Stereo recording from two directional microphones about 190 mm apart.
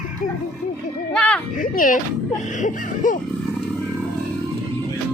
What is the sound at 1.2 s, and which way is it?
Speech, 5° left (ahead or behind).